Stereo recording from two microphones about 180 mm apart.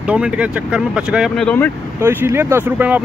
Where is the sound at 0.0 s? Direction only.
5° right (ahead or behind).